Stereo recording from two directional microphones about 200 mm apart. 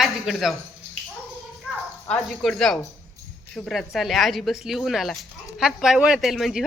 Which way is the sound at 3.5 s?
Centre (ahead or behind).